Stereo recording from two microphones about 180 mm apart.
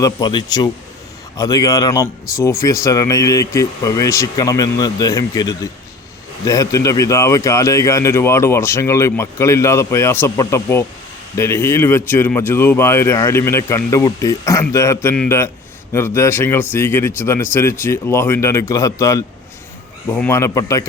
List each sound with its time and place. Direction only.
0.0 s speech: 25° left (ahead or behind)